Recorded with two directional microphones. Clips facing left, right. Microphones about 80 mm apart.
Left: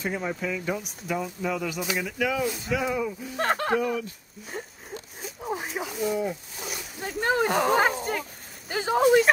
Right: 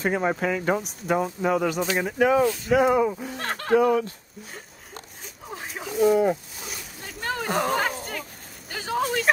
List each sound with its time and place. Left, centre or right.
0.0 s speech: right
2.7 s speech: right
3.3 s speech: left
3.7 s speech: right
5.7 s a sound: centre
7.0 s speech: left
7.7 s dog: centre
8.1 s a sound: centre